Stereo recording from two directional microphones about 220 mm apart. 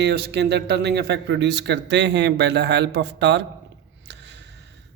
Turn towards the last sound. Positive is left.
turn(degrees=-55)  # may be behind; listen again after turning